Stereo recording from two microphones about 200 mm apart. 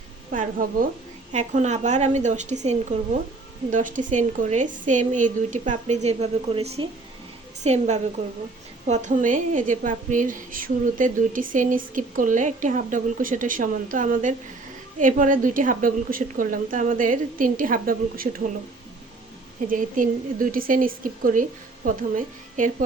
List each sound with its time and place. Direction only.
0.3 s a woman's voice: 45° right (ahead or behind)
19.6 s a woman's voice: 40° right (ahead or behind)